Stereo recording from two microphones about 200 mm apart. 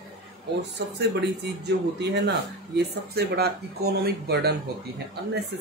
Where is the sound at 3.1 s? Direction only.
50° right (ahead or behind).